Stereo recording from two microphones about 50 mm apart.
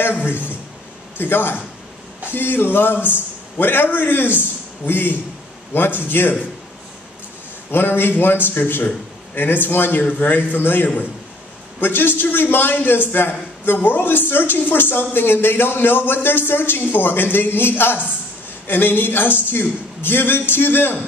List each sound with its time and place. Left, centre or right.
0.0 s a man's voice: left
7.7 s a man's voice: left